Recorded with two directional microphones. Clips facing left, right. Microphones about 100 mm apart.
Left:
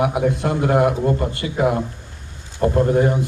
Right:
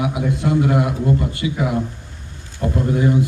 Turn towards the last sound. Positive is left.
turn(degrees=55)  # may be behind; listen again after turning